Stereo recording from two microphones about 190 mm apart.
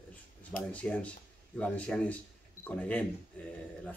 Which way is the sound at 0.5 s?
5° left (ahead or behind).